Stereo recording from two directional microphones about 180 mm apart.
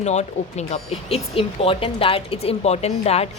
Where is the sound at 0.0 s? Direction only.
40° left (ahead or behind).